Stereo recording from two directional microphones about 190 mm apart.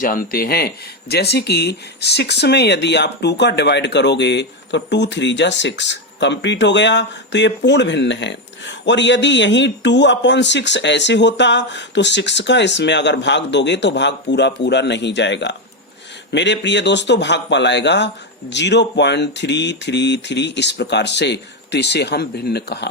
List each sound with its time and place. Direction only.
0.0 s a man's voice: 45° left (ahead or behind)